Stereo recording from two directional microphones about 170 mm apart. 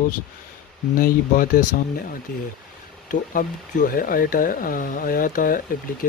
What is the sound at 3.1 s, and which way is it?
Speech, 50° left (ahead or behind).